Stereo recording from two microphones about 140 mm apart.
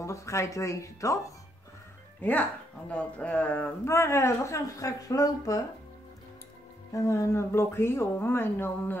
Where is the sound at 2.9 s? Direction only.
10° left (ahead or behind); by 5.7 s 25° left (ahead or behind).